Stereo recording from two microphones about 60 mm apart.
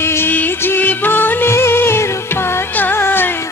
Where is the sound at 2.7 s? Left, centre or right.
Left.